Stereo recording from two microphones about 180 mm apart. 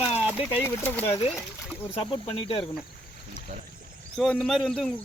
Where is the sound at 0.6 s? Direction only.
10° left (ahead or behind).